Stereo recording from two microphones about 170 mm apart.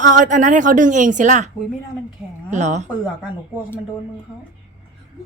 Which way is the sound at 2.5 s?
45° right (ahead or behind).